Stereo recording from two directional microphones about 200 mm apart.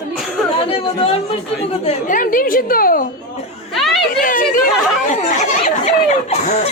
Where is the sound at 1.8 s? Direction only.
40° left (ahead or behind).